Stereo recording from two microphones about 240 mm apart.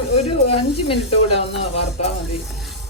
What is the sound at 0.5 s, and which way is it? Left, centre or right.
Speech, left.